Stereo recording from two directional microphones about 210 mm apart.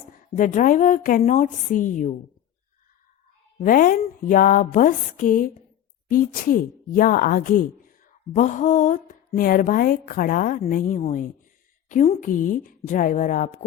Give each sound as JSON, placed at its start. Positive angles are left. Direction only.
{"t": 0.3, "sound": "a woman's voice", "side_deg": 40}
{"t": 3.6, "sound": "a woman's voice", "side_deg": 40}